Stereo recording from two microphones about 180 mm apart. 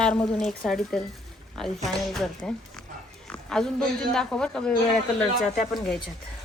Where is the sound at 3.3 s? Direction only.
5° left (ahead or behind).